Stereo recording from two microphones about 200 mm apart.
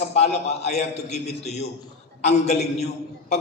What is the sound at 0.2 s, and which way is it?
A man's voice, 35° left (ahead or behind).